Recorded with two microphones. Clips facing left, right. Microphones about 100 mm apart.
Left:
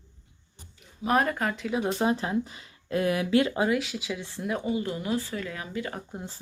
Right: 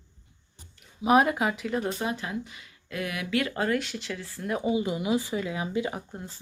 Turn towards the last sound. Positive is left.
turn(degrees=-15)  # may be behind; listen again after turning